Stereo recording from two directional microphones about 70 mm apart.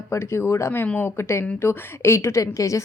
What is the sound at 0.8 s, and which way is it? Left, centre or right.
Speech, left.